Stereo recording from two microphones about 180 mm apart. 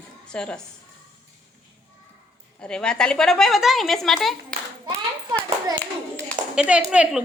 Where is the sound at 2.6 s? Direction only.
5° left (ahead or behind).